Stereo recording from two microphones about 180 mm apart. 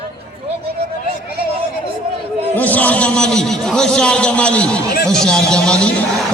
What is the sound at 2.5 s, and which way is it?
A man's voice, 10° left (ahead or behind).